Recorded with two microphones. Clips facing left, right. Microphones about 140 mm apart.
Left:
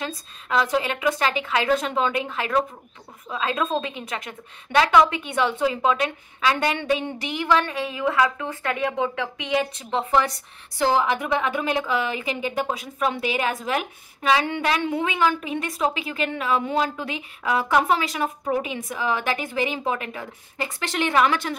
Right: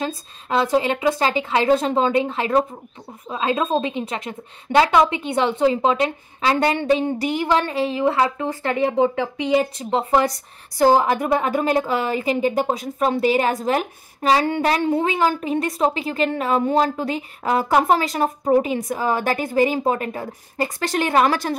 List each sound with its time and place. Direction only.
0.0 s a woman's voice: 25° right (ahead or behind)